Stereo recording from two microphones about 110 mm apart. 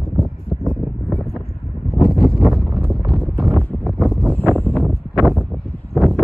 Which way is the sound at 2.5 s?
Centre (ahead or behind).